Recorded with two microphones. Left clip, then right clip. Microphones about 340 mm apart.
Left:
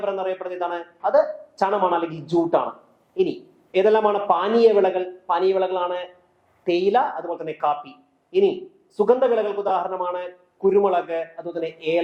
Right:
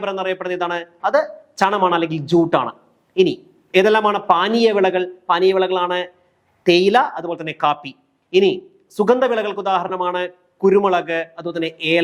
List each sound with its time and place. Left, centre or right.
0.0 s speech: right